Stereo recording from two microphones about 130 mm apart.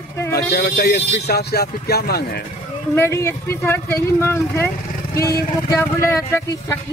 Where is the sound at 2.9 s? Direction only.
20° left (ahead or behind).